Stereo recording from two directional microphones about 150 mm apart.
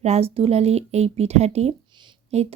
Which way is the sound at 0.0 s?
45° right (ahead or behind).